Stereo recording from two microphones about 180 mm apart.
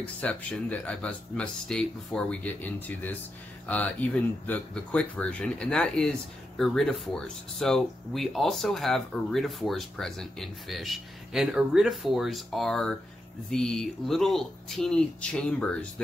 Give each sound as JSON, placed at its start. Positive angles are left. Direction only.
{"t": 0.0, "sound": "speech", "side_deg": 5}